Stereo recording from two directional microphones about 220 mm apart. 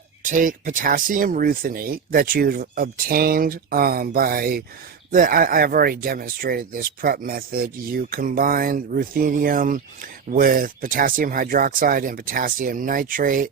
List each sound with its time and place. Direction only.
0.2 s speech: 35° right (ahead or behind)